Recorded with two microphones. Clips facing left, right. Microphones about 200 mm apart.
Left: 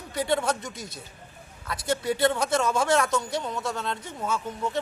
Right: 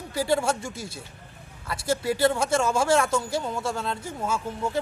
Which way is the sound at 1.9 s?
5° right (ahead or behind).